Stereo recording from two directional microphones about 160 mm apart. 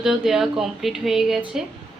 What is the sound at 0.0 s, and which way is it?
Speech, 5° right (ahead or behind).